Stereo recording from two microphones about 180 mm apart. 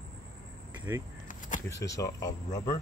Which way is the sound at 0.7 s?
10° right (ahead or behind).